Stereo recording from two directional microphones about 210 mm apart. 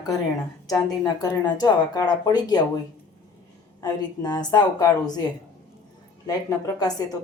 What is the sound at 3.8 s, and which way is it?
Speech, 20° left (ahead or behind).